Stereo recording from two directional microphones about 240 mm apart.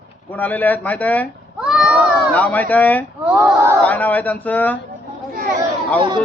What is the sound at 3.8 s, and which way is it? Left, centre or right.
Speech, centre.